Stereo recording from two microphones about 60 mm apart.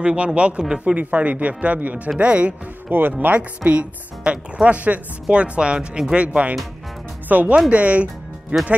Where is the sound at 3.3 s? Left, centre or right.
Right.